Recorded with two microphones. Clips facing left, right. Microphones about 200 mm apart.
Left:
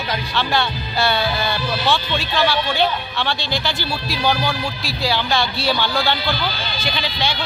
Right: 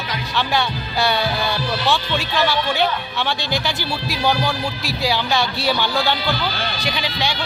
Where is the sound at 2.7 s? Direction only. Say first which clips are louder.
Even; 15° right (ahead or behind).